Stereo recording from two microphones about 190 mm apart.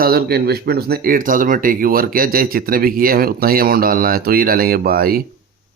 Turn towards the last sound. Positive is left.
turn(degrees=-50)  # may be behind; listen again after turning